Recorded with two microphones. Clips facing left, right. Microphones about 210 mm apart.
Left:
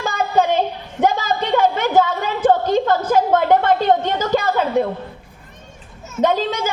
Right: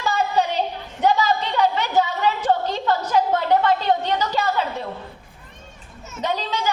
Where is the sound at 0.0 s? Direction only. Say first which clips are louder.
Left 3 dB; 50° left (ahead or behind).